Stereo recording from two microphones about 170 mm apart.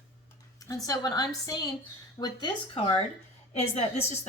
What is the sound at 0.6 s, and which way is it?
A woman's voice, 20° left (ahead or behind).